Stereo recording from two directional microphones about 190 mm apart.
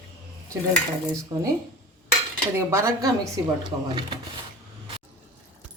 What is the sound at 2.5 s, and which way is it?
Speech, 15° right (ahead or behind).